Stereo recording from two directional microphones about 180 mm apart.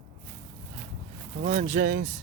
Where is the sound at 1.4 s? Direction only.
45° right (ahead or behind).